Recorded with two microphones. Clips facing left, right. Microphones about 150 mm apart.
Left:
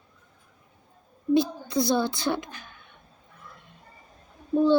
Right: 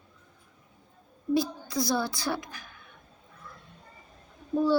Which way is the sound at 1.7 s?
25° left (ahead or behind).